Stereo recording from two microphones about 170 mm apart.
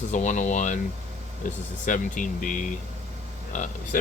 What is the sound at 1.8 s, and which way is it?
Speech, 50° left (ahead or behind).